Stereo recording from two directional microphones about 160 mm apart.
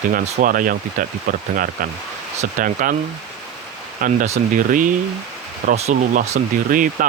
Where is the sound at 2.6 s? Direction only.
60° right (ahead or behind).